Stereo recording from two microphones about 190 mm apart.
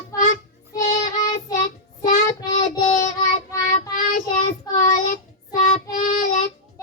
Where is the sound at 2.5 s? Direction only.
20° left (ahead or behind).